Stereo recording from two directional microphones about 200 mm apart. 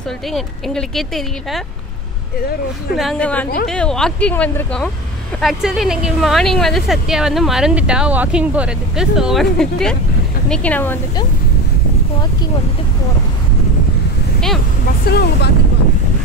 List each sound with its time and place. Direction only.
0.3 s speech: centre (ahead or behind)
3.0 s a woman's voice: 5° left (ahead or behind)
15.0 s speech: 55° left (ahead or behind)